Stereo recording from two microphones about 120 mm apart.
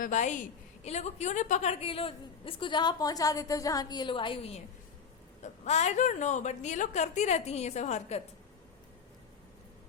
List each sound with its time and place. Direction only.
0.1 s a woman's voice: 90° left
0.9 s a woman's voice: 65° left (ahead or behind)
5.4 s a woman's voice: 65° left (ahead or behind)